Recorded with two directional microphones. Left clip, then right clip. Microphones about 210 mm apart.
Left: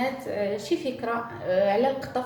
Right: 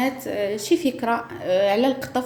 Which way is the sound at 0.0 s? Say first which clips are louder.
Right 3 dB; 50° right (ahead or behind).